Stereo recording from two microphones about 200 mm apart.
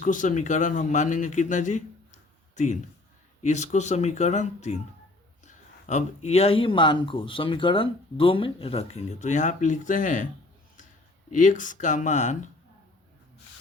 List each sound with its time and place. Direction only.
0.0 s speech: 40° left (ahead or behind)
3.4 s speech: 35° left (ahead or behind)
11.3 s speech: 40° left (ahead or behind)